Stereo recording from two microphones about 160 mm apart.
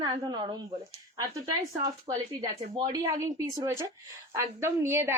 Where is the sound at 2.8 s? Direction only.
25° right (ahead or behind).